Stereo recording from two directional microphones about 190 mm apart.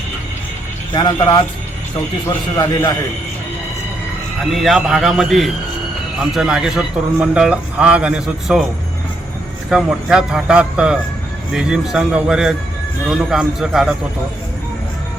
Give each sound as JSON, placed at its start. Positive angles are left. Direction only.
{"t": 0.9, "sound": "speech", "side_deg": 20}
{"t": 4.5, "sound": "a man's voice", "side_deg": 0}
{"t": 9.6, "sound": "a man's voice", "side_deg": -5}